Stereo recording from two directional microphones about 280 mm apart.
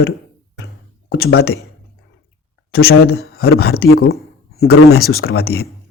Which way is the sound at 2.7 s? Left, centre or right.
Left.